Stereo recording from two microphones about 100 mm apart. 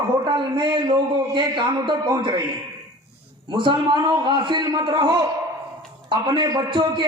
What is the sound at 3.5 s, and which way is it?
A man's voice, 55° right (ahead or behind).